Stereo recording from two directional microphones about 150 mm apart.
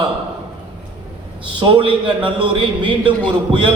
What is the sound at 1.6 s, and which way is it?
A man's voice, 35° right (ahead or behind).